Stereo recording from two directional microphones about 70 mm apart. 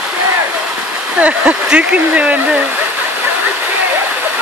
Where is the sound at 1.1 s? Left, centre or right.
Right.